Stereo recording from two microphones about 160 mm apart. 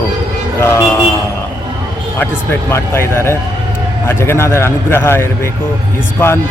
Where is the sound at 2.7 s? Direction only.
15° left (ahead or behind).